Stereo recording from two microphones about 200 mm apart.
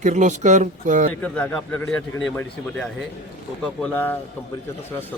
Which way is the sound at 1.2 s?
5° left (ahead or behind).